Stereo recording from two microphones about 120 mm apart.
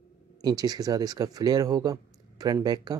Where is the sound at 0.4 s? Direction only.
35° right (ahead or behind).